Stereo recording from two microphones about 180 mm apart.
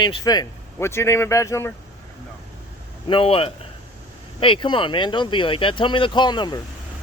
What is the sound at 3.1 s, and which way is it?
A man's voice, 30° left (ahead or behind).